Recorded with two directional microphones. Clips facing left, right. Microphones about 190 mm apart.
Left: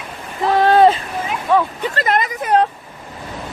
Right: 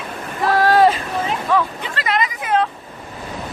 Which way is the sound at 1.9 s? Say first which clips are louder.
Left 2 dB; 45° left (ahead or behind).